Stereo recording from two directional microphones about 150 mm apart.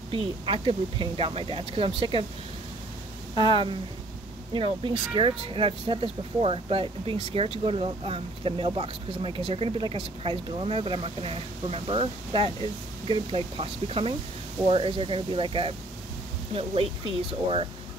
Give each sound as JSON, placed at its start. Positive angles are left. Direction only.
{"t": 0.1, "sound": "speech", "side_deg": -35}
{"t": 3.3, "sound": "speech", "side_deg": -30}